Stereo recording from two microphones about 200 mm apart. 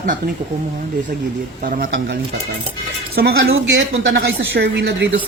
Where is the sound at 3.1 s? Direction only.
65° right (ahead or behind).